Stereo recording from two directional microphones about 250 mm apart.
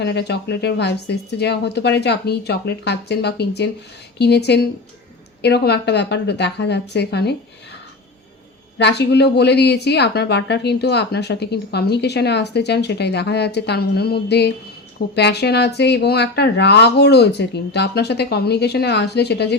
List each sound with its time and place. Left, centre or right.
0.0 s a woman's voice: left
8.8 s a woman's voice: left